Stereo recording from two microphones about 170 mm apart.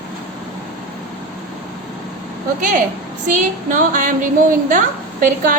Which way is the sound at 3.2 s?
50° right (ahead or behind).